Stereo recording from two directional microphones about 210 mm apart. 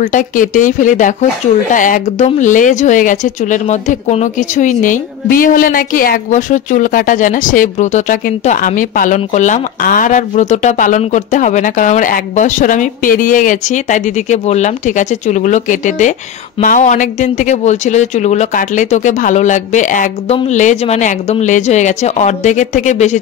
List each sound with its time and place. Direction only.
0.0 s speech: 40° left (ahead or behind)